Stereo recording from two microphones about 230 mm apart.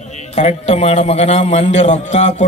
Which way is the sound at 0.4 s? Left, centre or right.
Left.